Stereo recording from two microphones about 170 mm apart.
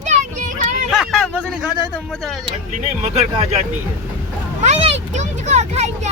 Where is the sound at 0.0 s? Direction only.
45° right (ahead or behind).